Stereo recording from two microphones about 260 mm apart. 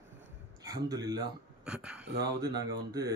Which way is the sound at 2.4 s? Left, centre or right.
Centre.